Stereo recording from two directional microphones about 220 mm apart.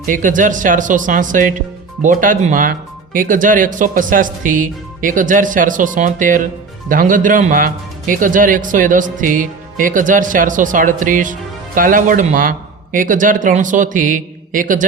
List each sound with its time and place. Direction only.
0.0 s speech: 35° right (ahead or behind)